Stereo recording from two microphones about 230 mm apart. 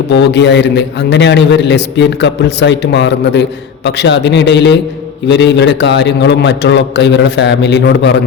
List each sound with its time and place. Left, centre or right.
0.1 s a man's voice: left